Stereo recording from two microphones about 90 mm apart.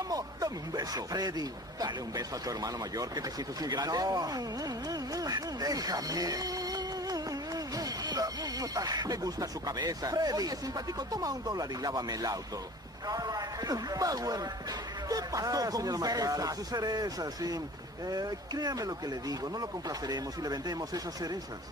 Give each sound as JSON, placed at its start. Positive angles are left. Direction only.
{"t": 0.1, "sound": "speech", "side_deg": -45}